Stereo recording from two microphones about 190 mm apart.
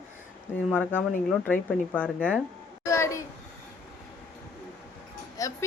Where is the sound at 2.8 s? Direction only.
15° left (ahead or behind).